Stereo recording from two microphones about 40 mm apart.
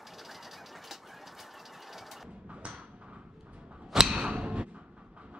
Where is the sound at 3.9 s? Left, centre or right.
Centre.